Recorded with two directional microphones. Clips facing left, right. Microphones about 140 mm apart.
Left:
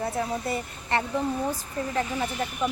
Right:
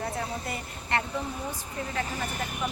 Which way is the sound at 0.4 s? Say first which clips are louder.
Left 5 dB; 30° left (ahead or behind).